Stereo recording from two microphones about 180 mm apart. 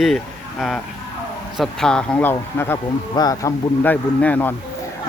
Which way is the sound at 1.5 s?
5° left (ahead or behind).